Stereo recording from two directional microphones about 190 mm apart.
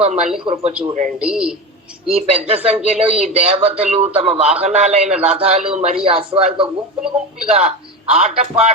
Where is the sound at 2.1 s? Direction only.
35° right (ahead or behind).